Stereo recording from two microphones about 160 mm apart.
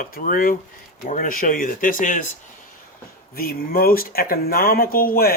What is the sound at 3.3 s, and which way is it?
Speech, 70° left (ahead or behind).